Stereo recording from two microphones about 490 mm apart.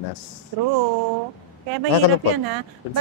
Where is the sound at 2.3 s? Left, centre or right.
Right.